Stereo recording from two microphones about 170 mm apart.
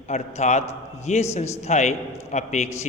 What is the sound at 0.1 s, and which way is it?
A man's voice, 45° left (ahead or behind).